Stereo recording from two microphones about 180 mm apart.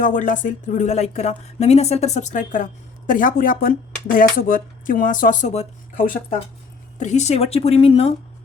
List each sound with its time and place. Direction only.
0.0 s speech: 45° left (ahead or behind)